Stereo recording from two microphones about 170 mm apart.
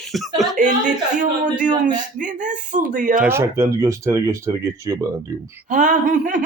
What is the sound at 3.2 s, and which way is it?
Speech, 15° right (ahead or behind).